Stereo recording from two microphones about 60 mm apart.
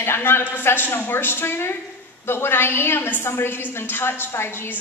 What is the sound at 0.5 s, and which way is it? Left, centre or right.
A woman's voice, left.